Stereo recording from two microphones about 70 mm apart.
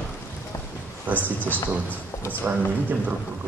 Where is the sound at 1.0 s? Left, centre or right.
Right.